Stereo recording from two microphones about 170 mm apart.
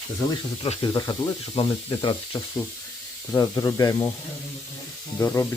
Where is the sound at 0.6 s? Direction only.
30° left (ahead or behind).